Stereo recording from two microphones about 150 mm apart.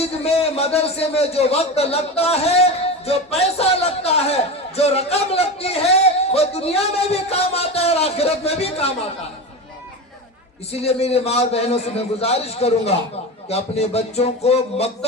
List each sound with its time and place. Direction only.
0.0 s a man's voice: 40° left (ahead or behind)
10.7 s a man's voice: 45° left (ahead or behind)